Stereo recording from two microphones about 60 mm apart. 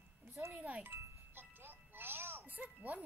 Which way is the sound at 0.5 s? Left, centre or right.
Right.